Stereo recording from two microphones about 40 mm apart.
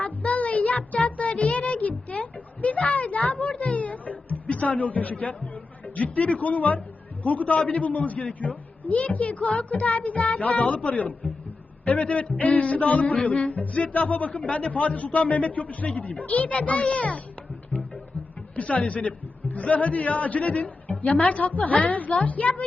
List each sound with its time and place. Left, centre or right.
0.0 s music: left
0.9 s a sound: left
6.0 s a man's voice: left
18.5 s a man's voice: left